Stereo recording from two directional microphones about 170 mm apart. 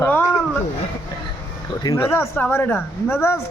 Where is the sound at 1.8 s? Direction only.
15° left (ahead or behind).